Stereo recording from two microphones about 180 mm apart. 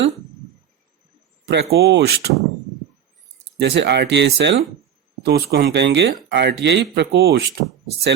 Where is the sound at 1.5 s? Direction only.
70° right (ahead or behind).